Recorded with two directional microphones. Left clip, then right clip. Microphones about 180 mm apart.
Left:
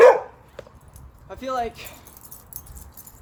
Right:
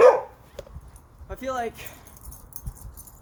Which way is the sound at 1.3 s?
30° right (ahead or behind).